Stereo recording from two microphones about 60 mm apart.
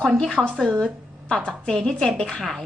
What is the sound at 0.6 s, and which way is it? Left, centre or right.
A woman's voice, centre.